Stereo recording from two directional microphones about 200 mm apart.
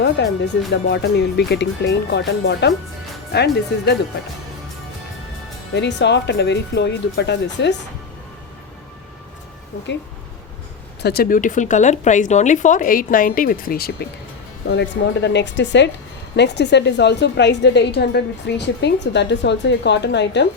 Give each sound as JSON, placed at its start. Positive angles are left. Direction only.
{"t": 0.2, "sound": "a woman's voice", "side_deg": 60}
{"t": 5.7, "sound": "a woman's voice", "side_deg": 60}
{"t": 11.0, "sound": "a woman's voice", "side_deg": 50}